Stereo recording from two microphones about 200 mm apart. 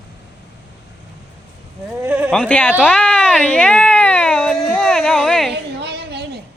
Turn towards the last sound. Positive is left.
turn(degrees=-55)  # may be behind; listen again after turning